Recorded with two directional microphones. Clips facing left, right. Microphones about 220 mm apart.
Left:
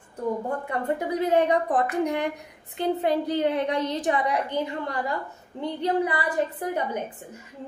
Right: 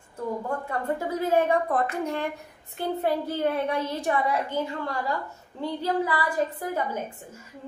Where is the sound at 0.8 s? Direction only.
20° left (ahead or behind).